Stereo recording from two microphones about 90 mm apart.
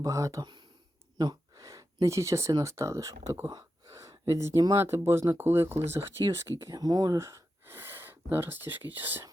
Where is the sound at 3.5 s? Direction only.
45° right (ahead or behind).